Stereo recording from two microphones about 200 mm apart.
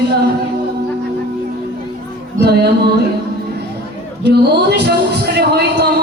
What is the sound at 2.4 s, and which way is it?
Music, 55° right (ahead or behind).